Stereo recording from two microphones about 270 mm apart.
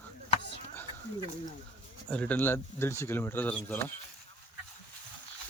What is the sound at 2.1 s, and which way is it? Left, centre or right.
Speech, centre.